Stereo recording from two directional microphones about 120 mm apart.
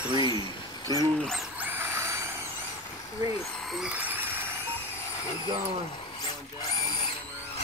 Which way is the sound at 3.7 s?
10° right (ahead or behind).